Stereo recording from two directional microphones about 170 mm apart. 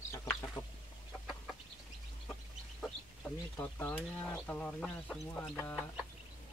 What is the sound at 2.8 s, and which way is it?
Speech, 10° left (ahead or behind).